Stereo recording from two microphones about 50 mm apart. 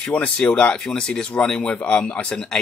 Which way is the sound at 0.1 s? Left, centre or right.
Left.